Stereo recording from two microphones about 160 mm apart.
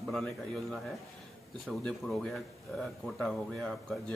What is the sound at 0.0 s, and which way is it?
Speech, centre (ahead or behind).